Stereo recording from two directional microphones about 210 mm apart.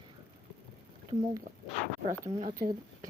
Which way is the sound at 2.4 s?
35° right (ahead or behind).